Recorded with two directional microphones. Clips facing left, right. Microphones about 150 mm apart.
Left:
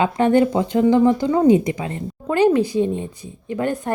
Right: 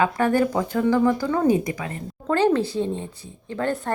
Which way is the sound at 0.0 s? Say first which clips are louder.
Left 4 dB; 25° left (ahead or behind).